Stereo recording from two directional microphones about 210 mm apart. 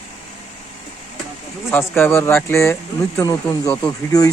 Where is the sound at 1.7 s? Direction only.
10° left (ahead or behind).